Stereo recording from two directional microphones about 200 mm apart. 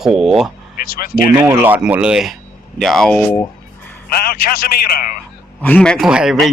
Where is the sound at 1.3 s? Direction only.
10° right (ahead or behind); by 3.4 s 5° left (ahead or behind).